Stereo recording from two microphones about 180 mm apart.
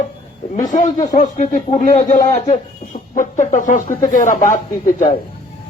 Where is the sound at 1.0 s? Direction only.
45° left (ahead or behind).